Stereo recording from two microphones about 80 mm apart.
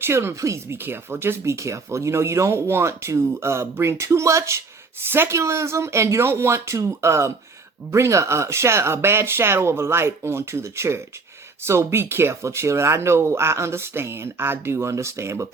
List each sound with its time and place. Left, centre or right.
0.0 s speech: right